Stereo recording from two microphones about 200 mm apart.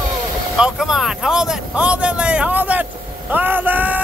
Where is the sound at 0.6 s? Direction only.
Centre (ahead or behind).